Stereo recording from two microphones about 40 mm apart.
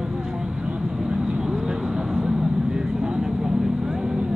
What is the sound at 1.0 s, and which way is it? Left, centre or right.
Vehicle, right.